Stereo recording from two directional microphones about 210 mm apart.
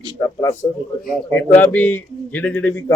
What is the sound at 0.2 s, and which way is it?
Speech, 15° left (ahead or behind).